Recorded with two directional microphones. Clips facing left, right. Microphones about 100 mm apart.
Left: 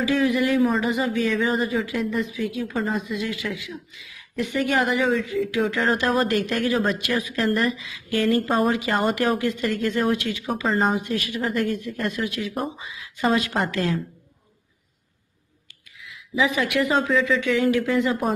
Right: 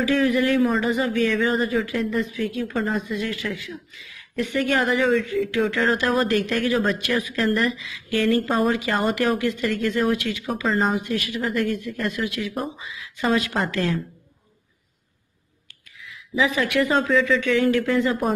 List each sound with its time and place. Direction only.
0.0 s speech: 15° left (ahead or behind)
3.1 s speech: 15° left (ahead or behind)
5.1 s speech: 10° left (ahead or behind)
5.5 s speech: 20° left (ahead or behind)
16.7 s a woman's voice: 5° left (ahead or behind)